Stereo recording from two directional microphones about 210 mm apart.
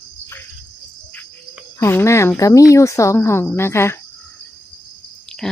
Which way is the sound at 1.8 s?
10° left (ahead or behind).